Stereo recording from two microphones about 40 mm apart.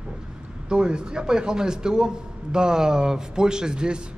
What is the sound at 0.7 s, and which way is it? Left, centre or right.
A man's voice, right.